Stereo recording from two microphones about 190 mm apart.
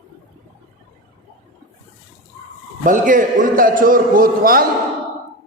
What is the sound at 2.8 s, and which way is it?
A man's voice, 45° right (ahead or behind).